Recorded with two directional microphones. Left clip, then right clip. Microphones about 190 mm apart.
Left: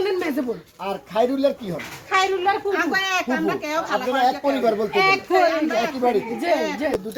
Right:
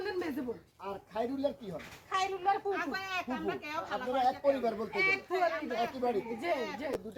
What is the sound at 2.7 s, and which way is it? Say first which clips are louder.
Speech: left 15 dB; 40° left (ahead or behind).